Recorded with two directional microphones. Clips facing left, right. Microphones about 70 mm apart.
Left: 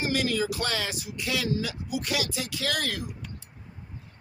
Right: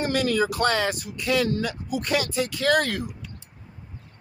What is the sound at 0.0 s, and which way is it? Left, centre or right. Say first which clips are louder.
Speech: right 4 dB; right.